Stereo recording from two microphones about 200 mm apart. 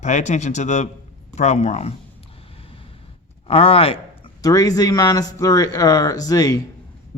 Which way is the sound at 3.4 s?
30° left (ahead or behind).